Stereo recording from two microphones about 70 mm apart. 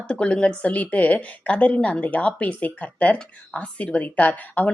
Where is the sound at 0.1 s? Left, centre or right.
Centre.